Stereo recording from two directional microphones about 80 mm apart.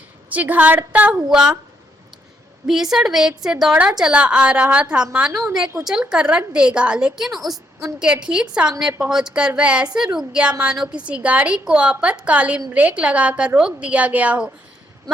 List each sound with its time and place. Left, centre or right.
0.3 s a woman's voice: centre
2.6 s a woman's voice: centre